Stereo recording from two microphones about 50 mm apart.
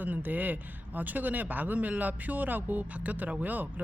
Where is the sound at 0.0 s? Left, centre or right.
Right.